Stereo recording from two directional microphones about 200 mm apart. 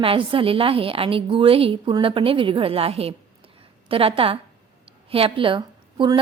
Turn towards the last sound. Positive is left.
turn(degrees=-25)  # may be behind; listen again after turning